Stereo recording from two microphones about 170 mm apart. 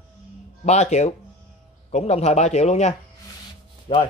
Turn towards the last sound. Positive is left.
turn(degrees=30)  # may be behind; listen again after turning